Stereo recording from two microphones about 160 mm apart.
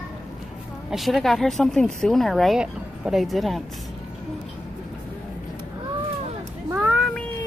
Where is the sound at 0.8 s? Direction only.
Centre (ahead or behind).